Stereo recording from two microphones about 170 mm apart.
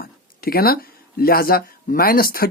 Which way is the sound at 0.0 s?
60° left (ahead or behind).